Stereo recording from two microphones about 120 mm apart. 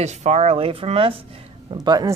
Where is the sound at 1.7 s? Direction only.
35° right (ahead or behind).